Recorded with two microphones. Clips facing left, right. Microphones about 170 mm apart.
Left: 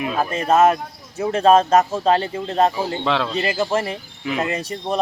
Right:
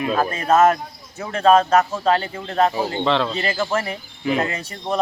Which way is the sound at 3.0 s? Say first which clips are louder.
Right 3 dB; 5° left (ahead or behind).